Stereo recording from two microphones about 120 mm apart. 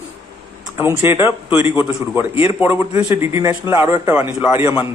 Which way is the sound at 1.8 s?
10° right (ahead or behind).